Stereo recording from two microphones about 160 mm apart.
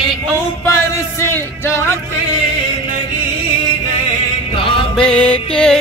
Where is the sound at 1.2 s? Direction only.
15° left (ahead or behind).